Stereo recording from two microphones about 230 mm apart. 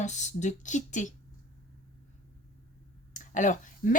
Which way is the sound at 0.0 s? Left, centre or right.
Left.